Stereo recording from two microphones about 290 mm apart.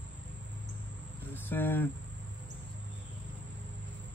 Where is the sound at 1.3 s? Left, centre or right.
Centre.